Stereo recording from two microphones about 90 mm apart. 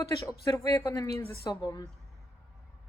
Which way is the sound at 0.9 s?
40° left (ahead or behind).